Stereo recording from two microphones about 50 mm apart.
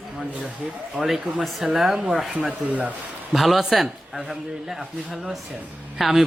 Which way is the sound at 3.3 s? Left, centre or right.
Centre.